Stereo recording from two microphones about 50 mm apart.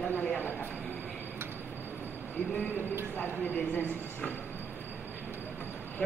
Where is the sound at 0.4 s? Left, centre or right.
Left.